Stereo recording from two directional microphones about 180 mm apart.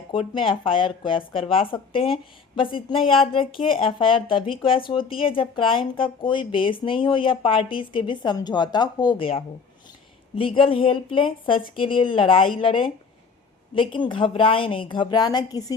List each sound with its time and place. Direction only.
0.1 s speech: 30° left (ahead or behind)